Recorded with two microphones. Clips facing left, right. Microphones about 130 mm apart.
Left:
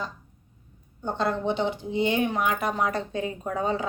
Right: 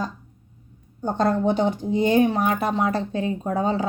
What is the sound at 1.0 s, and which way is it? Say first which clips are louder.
A woman's voice: right 5 dB; 45° right (ahead or behind).